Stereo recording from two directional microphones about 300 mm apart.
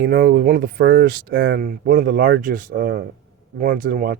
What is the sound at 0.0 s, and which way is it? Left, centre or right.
Speech, right.